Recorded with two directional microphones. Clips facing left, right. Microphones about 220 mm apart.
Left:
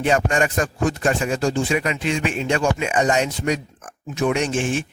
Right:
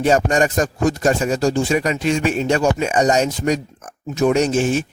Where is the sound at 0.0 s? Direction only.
40° right (ahead or behind).